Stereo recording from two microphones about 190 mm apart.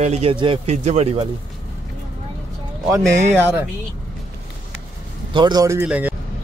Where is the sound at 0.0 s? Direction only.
35° right (ahead or behind).